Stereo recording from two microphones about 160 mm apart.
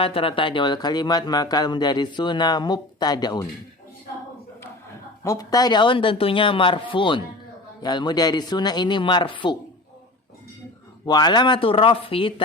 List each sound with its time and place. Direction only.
0.0 s speech: 35° left (ahead or behind)
5.2 s speech: 20° left (ahead or behind)
11.0 s speech: 25° left (ahead or behind)